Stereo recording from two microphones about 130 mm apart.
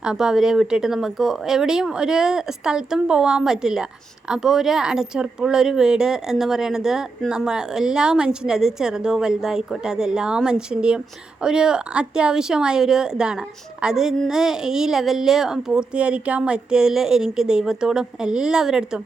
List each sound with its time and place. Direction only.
0.0 s a woman's voice: 5° right (ahead or behind)